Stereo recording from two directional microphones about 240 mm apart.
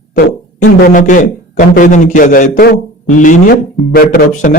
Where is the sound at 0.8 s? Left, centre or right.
Left.